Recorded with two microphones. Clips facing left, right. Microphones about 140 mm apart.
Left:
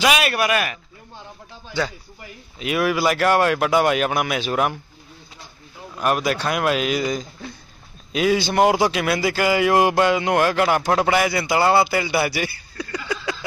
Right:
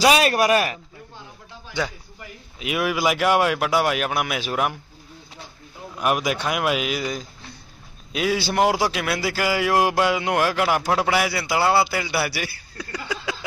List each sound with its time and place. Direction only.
0.0 s speech: 35° right (ahead or behind)
1.8 s speech: 15° right (ahead or behind)
5.9 s speech: 10° right (ahead or behind)